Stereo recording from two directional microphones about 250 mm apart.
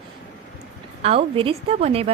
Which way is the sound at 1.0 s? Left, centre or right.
Right.